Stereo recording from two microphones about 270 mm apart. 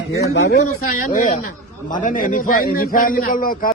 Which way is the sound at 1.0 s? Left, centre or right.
Left.